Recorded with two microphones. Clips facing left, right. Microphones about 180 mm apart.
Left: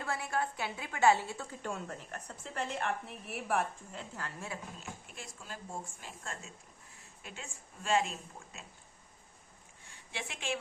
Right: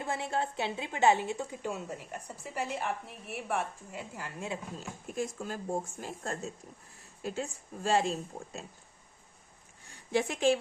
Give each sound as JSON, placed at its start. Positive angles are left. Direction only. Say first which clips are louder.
{"t": 0.0, "sound": "a woman's voice", "louder": "right 2 dB", "side_deg": -20}
{"t": 3.9, "sound": "a woman's voice", "louder": "right 5 dB", "side_deg": -10}
{"t": 4.8, "sound": "speech", "louder": "right 11 dB", "side_deg": -45}
{"t": 9.9, "sound": "speech", "louder": "right 14 dB", "side_deg": -40}